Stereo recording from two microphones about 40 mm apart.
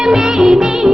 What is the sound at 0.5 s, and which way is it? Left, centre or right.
Music, centre.